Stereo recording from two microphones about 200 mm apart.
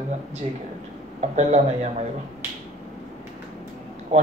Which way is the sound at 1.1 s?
35° right (ahead or behind).